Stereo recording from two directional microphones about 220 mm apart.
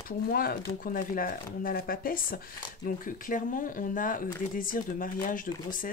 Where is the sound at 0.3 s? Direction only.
40° left (ahead or behind).